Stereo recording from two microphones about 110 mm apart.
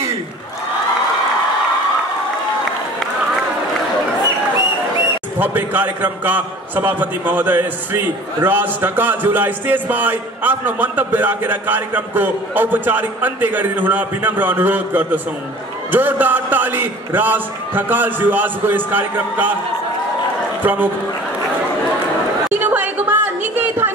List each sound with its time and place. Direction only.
5.4 s speech: 15° right (ahead or behind)
20.6 s speech: 15° right (ahead or behind)
22.5 s chatter: 15° right (ahead or behind)